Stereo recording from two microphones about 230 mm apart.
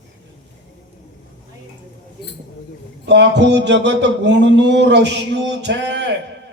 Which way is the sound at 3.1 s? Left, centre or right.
Right.